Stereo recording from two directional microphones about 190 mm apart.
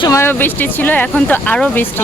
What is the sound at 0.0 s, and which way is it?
A woman's voice, 15° left (ahead or behind).